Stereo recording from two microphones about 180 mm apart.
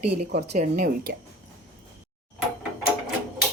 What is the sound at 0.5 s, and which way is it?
Speech, 50° right (ahead or behind).